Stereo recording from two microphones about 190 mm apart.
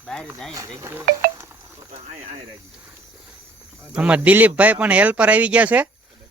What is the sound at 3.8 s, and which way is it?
Speech, 5° right (ahead or behind).